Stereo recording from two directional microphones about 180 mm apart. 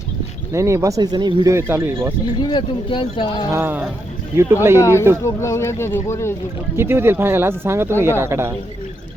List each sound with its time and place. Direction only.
0.5 s speech: 15° right (ahead or behind)
2.4 s speech: 25° left (ahead or behind)
3.5 s speech: 10° right (ahead or behind)
4.8 s speech: 15° left (ahead or behind)
6.7 s speech: 15° right (ahead or behind)